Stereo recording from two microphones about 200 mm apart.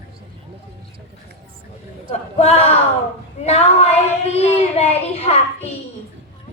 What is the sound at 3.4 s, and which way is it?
Child singing, 30° left (ahead or behind).